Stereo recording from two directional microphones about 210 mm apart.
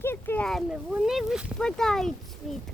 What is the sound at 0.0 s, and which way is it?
Speech, 10° left (ahead or behind).